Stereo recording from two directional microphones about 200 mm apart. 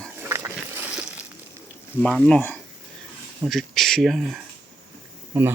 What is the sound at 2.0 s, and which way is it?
Speech, 5° left (ahead or behind).